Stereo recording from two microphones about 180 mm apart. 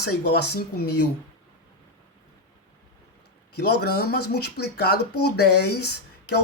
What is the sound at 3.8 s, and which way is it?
Speech, 60° left (ahead or behind).